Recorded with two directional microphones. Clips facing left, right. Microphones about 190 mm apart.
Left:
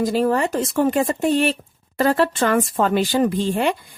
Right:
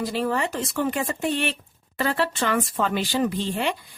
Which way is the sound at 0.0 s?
45° left (ahead or behind).